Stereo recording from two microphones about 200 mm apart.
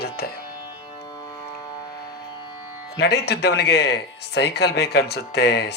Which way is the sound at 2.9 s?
55° left (ahead or behind).